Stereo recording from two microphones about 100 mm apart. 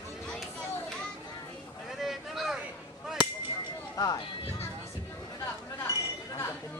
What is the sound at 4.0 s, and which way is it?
Music, 40° left (ahead or behind).